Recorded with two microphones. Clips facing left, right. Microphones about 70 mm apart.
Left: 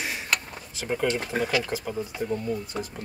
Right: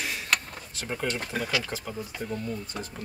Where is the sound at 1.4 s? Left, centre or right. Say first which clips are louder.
Left 4 dB; centre.